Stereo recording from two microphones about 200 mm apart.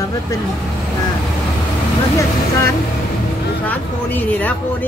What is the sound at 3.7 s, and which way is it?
Speech, 10° left (ahead or behind).